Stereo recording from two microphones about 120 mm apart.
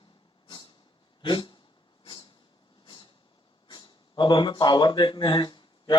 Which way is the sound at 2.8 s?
40° left (ahead or behind).